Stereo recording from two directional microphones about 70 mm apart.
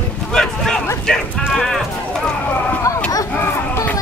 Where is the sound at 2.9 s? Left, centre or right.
Left.